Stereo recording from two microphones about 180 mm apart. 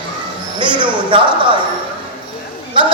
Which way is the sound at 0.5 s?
25° right (ahead or behind).